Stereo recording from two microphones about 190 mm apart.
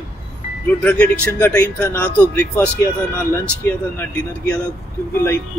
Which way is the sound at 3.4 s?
10° left (ahead or behind).